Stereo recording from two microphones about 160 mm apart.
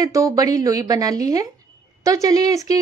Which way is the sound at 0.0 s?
20° right (ahead or behind).